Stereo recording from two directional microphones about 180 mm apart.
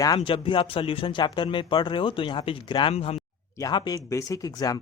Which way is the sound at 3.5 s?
20° left (ahead or behind).